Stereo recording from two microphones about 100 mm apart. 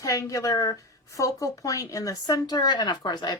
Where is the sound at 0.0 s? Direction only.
35° left (ahead or behind).